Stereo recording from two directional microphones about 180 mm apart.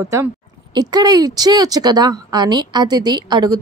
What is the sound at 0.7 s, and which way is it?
Speech, 20° right (ahead or behind).